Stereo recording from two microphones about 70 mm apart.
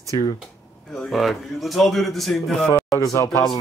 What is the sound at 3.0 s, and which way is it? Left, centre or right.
Speech, left.